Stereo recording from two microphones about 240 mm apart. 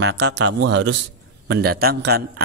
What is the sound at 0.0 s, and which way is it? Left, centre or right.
A man's voice, right.